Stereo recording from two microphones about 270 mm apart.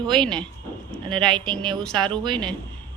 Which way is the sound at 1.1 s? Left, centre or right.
Centre.